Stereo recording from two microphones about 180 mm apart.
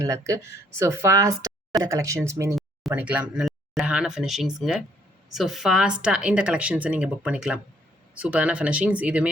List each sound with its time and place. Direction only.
0.0 s speech: 15° right (ahead or behind)
2.6 s speech: 5° right (ahead or behind)